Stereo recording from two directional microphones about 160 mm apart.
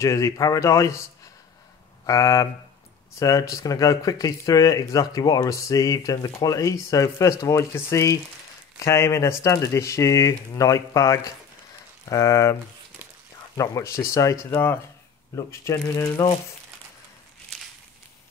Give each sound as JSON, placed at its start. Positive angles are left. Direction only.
{"t": 0.0, "sound": "speech", "side_deg": 20}
{"t": 2.0, "sound": "speech", "side_deg": 20}
{"t": 13.6, "sound": "speech", "side_deg": 20}